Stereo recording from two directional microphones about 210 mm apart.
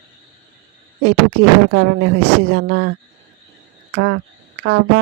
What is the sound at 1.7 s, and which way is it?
Speech, 60° right (ahead or behind).